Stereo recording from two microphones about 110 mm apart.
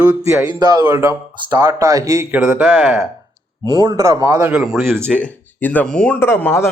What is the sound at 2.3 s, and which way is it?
Speech, 15° right (ahead or behind).